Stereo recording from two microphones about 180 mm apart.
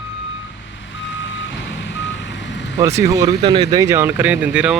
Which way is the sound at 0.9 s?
90° left.